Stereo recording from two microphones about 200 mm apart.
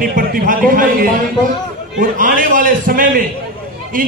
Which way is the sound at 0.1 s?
45° right (ahead or behind).